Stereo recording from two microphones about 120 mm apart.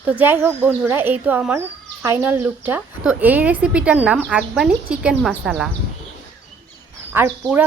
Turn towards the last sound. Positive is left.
turn(degrees=-15)  # may be behind; listen again after turning